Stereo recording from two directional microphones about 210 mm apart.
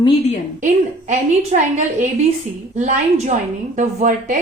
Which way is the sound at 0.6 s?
35° right (ahead or behind).